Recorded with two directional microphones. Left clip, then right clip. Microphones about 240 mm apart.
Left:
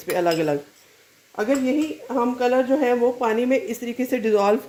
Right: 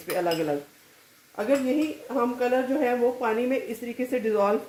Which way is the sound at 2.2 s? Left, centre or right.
Left.